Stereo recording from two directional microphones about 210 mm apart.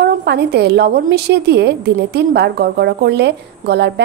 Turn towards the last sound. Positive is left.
turn(degrees=-55)  # may be behind; listen again after turning